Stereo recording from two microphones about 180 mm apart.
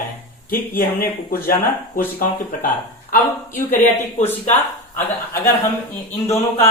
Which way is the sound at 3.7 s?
40° left (ahead or behind).